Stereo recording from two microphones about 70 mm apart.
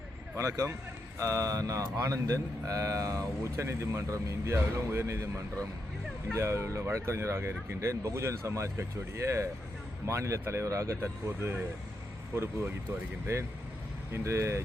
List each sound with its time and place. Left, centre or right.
0.3 s speech: right